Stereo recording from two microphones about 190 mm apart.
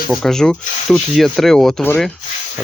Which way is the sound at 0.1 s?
Centre (ahead or behind).